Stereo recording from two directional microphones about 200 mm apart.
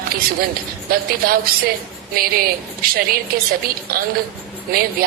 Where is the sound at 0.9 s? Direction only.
50° right (ahead or behind).